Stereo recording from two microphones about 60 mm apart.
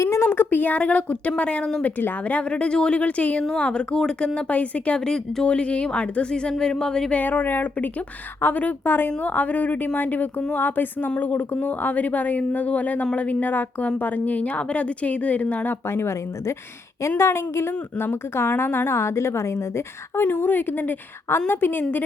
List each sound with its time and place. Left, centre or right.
0.0 s a sound: left
0.3 s speech: left
1.8 s speech: left; by 4.3 s centre
4.4 s speech: left
7.2 s a woman's voice: left
15.9 s a woman's voice: left
20.2 s a woman's voice: left